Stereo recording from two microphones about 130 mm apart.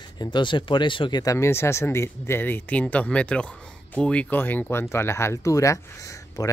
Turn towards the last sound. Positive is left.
turn(degrees=30)  # may be behind; listen again after turning